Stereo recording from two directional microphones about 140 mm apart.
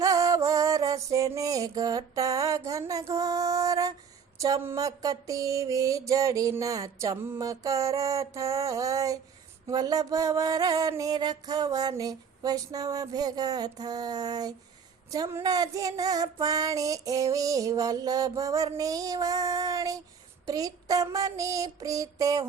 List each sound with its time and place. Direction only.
0.0 s music: 25° right (ahead or behind)